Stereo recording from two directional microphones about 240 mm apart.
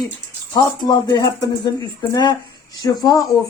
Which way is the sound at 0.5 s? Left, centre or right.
Centre.